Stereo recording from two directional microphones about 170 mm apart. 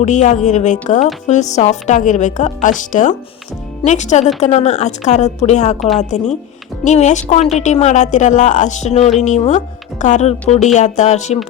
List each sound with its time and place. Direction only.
0.0 s a woman's voice: 45° left (ahead or behind)